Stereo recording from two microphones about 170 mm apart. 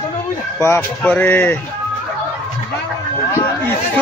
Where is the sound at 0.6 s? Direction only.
15° left (ahead or behind).